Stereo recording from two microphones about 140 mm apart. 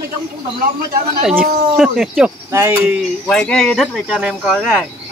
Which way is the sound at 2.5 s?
20° right (ahead or behind).